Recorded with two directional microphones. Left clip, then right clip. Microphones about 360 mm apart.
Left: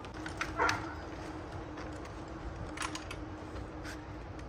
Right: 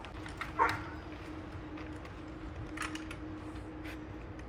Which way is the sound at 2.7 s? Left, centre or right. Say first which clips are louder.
Left 1 dB; left.